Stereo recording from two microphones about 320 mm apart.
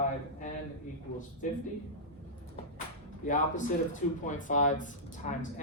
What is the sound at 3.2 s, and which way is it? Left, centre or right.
Speech, left.